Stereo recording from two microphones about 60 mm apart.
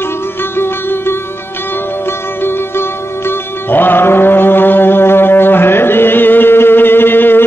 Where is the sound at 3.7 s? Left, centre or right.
Left.